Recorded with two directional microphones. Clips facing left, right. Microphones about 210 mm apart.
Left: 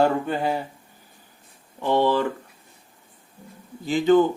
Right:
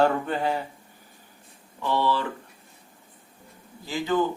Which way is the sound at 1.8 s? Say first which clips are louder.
Left 5 dB; 50° left (ahead or behind).